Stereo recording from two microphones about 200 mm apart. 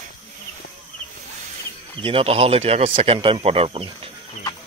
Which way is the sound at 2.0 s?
30° right (ahead or behind).